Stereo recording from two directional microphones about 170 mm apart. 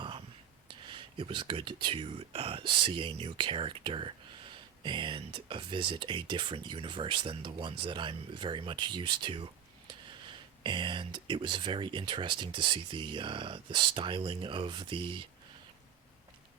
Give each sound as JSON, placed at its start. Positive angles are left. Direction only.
{"t": 0.7, "sound": "speech", "side_deg": -30}